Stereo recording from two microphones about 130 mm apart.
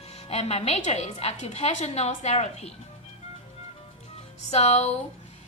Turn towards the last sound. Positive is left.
turn(degrees=55)  # may be behind; listen again after turning